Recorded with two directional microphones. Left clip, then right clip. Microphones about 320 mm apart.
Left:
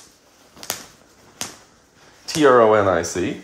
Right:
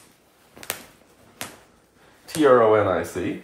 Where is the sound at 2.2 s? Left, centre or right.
Left.